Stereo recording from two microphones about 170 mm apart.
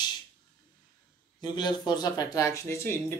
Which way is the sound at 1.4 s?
25° left (ahead or behind).